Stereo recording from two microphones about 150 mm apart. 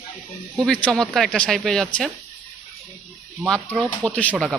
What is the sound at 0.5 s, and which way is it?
Speech, 5° left (ahead or behind).